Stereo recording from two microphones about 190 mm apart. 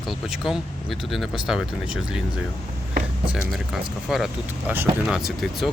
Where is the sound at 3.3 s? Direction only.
Centre (ahead or behind).